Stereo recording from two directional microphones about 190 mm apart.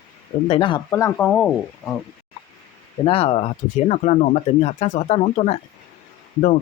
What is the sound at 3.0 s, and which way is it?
Speech, 30° left (ahead or behind).